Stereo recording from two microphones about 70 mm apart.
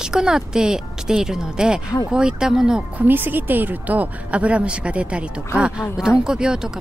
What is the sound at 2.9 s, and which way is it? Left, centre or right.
A woman's voice, right.